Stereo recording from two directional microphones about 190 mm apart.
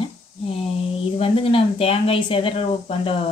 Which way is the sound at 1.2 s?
30° left (ahead or behind).